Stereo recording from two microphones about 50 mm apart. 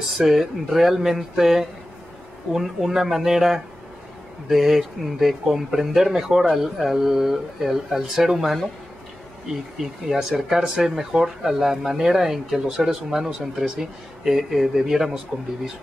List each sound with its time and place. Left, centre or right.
0.2 s speech: centre
10.0 s speech: centre